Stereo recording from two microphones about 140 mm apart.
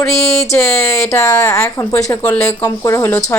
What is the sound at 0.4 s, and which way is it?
Speech, 20° left (ahead or behind).